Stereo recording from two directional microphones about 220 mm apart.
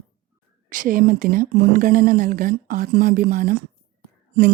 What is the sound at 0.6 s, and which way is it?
Speech, 40° right (ahead or behind).